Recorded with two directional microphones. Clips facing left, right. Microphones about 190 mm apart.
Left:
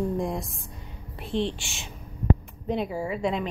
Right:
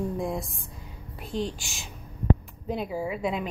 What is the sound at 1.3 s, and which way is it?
Speech, 30° left (ahead or behind).